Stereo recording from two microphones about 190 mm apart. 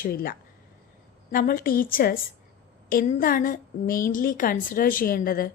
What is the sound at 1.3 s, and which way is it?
A woman's voice, 45° left (ahead or behind).